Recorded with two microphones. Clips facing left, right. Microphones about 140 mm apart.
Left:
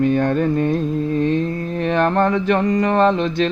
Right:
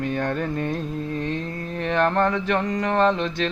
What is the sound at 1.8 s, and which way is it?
Mantra, 20° left (ahead or behind).